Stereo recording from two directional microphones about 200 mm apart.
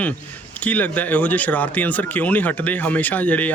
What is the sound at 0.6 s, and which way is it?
Speech, 10° left (ahead or behind).